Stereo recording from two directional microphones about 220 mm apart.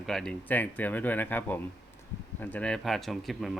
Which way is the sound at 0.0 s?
Centre (ahead or behind).